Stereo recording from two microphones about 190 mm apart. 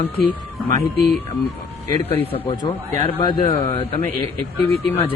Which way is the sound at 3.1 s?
25° left (ahead or behind).